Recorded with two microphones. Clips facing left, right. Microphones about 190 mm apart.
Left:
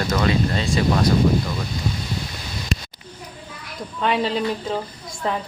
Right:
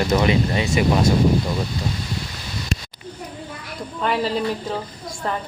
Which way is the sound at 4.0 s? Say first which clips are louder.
Left 1 dB; 5° right (ahead or behind).